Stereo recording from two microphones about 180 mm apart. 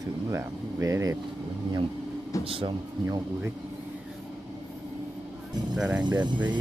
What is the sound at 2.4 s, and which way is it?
Speech, 30° right (ahead or behind).